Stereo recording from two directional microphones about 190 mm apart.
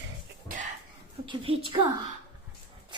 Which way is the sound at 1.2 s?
30° right (ahead or behind).